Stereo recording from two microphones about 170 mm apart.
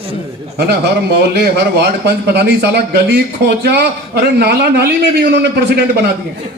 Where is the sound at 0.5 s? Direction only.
70° right (ahead or behind).